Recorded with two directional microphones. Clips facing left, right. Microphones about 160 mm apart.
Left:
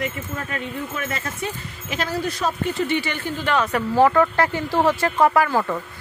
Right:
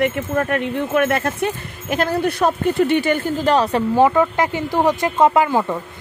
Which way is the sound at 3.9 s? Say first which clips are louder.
Even; 15° right (ahead or behind).